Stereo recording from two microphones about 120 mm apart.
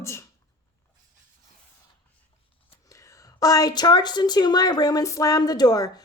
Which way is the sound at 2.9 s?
25° left (ahead or behind).